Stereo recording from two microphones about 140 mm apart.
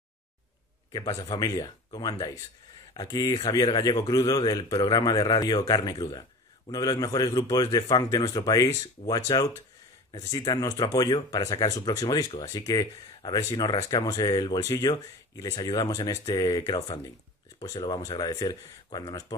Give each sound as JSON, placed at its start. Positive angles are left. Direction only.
{"t": 1.2, "sound": "speech", "side_deg": 30}